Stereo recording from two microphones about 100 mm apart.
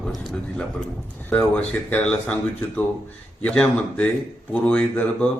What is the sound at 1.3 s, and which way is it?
Speech, 15° left (ahead or behind).